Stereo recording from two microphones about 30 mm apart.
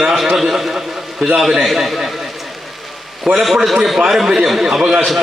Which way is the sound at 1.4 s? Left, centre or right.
Centre.